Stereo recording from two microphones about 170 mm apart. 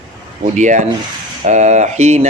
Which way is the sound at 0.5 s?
45° right (ahead or behind).